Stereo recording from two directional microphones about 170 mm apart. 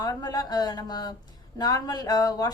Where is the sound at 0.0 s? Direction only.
25° left (ahead or behind).